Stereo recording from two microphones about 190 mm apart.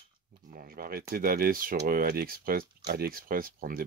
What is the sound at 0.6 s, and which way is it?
Speech, 50° right (ahead or behind).